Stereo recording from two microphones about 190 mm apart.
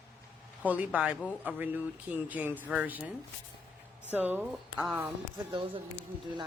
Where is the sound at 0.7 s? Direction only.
5° right (ahead or behind).